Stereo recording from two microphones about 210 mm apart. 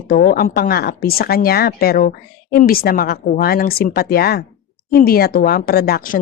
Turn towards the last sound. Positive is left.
turn(degrees=45)  # may be behind; listen again after turning